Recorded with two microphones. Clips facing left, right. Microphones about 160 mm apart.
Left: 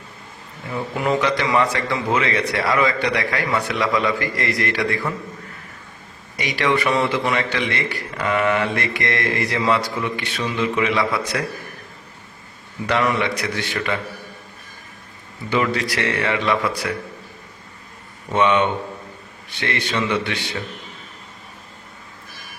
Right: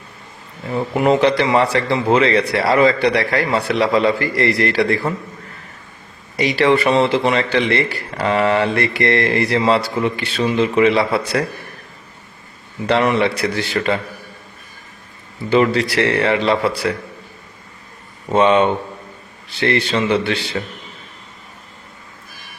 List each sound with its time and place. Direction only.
0.7 s a man's voice: 25° right (ahead or behind)
6.3 s a man's voice: 30° right (ahead or behind)
12.9 s a man's voice: 30° right (ahead or behind)
15.4 s a man's voice: 30° right (ahead or behind)
18.3 s a man's voice: 30° right (ahead or behind)